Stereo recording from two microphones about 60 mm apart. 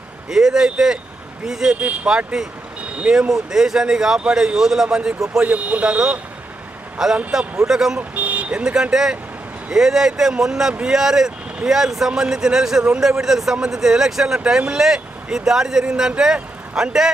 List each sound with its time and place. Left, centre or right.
0.3 s speech: centre
7.0 s speech: centre
8.1 s speech: right